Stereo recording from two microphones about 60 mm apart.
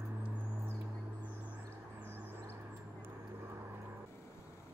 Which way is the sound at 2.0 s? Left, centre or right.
Right.